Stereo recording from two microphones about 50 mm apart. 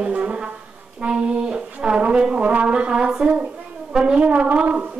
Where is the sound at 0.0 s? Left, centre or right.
Centre.